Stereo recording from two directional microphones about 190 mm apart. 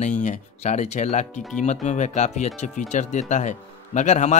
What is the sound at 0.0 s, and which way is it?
Speech, 40° left (ahead or behind).